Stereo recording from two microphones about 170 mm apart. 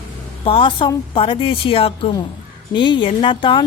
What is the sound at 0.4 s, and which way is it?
Speech, 30° left (ahead or behind).